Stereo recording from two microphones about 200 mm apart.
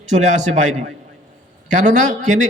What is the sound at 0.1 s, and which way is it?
Speech, 35° right (ahead or behind).